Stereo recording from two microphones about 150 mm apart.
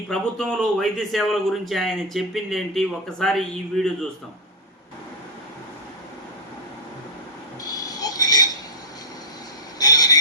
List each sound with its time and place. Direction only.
0.1 s a man's voice: 5° left (ahead or behind)
7.6 s a sound: 25° left (ahead or behind)
9.7 s vehicle: 25° left (ahead or behind)